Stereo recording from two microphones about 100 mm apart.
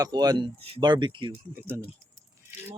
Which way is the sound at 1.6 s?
20° right (ahead or behind).